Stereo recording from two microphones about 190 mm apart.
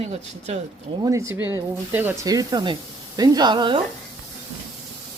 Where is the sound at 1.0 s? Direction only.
15° right (ahead or behind).